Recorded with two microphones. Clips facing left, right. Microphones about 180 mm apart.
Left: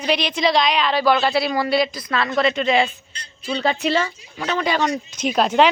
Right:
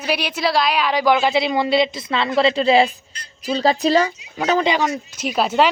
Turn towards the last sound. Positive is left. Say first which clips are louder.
# left 1 dB
turn(degrees=-5)  # may be behind; listen again after turning